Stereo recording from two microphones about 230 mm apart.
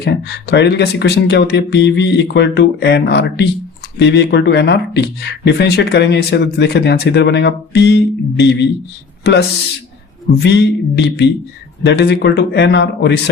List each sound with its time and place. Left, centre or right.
0.0 s speech: left
10.3 s speech: left